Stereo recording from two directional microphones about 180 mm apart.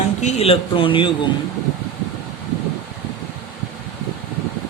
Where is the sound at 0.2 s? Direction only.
35° left (ahead or behind).